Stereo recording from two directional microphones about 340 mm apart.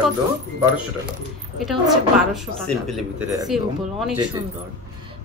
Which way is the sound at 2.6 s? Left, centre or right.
Centre.